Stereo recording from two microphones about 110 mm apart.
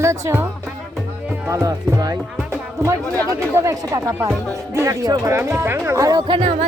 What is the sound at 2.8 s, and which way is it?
Speech, 30° right (ahead or behind).